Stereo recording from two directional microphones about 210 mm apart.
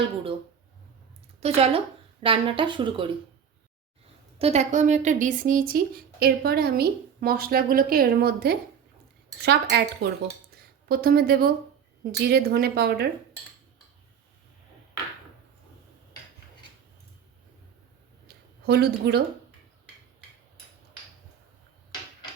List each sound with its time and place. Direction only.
1.4 s speech: 30° right (ahead or behind)
4.4 s a woman's voice: 30° right (ahead or behind); by 13.1 s 50° right (ahead or behind)
18.6 s a woman's voice: 50° right (ahead or behind)